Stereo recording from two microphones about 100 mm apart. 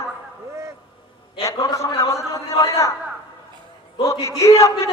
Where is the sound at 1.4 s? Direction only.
35° left (ahead or behind).